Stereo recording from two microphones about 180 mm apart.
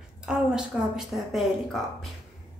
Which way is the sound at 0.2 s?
5° right (ahead or behind).